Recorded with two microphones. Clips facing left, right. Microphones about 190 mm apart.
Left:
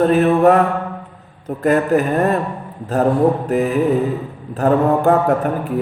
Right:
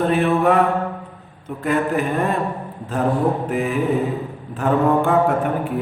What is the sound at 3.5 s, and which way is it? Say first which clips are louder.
A man's voice: left 4 dB; 40° left (ahead or behind).